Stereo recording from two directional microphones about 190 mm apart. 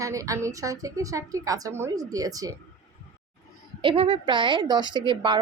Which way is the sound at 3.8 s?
30° right (ahead or behind).